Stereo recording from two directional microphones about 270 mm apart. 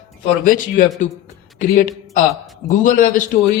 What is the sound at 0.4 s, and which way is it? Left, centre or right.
Speech, left.